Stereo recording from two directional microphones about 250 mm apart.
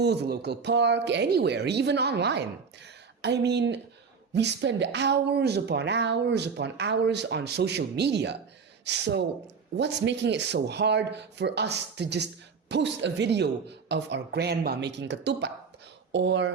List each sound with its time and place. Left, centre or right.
0.0 s speech: right